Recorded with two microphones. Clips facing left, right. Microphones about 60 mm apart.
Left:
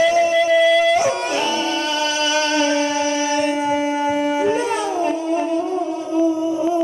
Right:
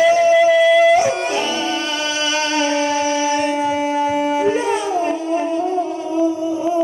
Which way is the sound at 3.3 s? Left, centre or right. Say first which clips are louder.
Right 1 dB; centre.